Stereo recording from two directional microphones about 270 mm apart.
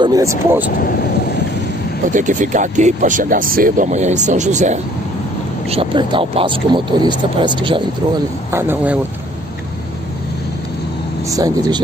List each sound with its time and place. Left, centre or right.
0.0 s speech: centre
2.1 s speech: right; by 9.0 s centre
11.2 s speech: centre